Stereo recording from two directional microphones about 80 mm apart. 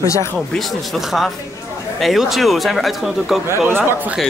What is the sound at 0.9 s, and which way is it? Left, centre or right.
A man's voice, centre.